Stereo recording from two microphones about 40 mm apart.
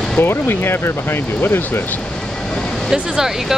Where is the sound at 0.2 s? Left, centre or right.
Left.